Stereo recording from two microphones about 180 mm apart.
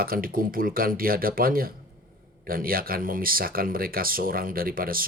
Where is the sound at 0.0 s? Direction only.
55° right (ahead or behind).